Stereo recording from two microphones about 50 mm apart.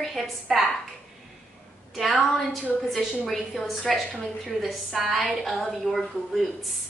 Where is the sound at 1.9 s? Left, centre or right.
Centre.